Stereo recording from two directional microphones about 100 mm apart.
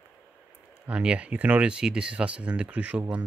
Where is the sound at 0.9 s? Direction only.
10° right (ahead or behind).